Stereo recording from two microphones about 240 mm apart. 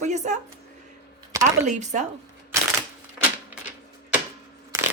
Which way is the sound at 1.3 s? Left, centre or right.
Centre.